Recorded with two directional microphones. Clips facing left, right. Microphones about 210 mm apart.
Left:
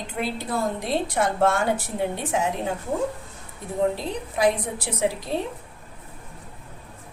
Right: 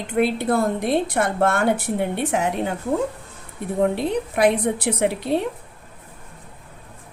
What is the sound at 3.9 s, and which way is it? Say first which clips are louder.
A woman's voice: right 6 dB; 60° right (ahead or behind).